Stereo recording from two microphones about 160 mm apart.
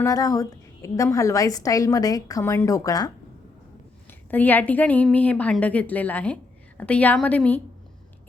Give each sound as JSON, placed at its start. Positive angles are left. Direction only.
{"t": 0.0, "sound": "a woman's voice", "side_deg": 20}
{"t": 4.3, "sound": "a woman's voice", "side_deg": 10}